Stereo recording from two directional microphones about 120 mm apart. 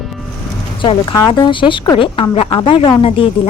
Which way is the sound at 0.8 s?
45° left (ahead or behind).